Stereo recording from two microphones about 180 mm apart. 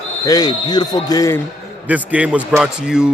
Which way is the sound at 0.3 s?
20° left (ahead or behind).